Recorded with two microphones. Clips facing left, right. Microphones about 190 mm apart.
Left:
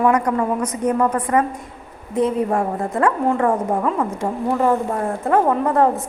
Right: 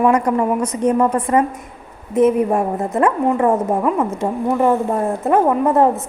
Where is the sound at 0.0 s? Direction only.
25° right (ahead or behind).